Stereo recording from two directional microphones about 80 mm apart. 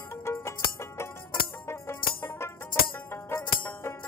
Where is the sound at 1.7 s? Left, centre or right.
Left.